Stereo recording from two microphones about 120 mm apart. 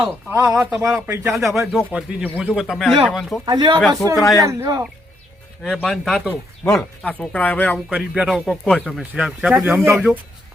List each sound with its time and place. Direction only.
0.3 s speech: 25° right (ahead or behind)
1.5 s speech: centre (ahead or behind)
1.9 s speech: 10° right (ahead or behind)
3.4 s speech: 40° right (ahead or behind)
4.2 s speech: 25° left (ahead or behind)
4.4 s speech: 25° right (ahead or behind)
5.6 s speech: 5° left (ahead or behind)
7.9 s speech: 5° right (ahead or behind)